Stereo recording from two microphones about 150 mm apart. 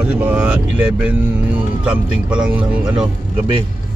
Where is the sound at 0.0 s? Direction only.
10° right (ahead or behind).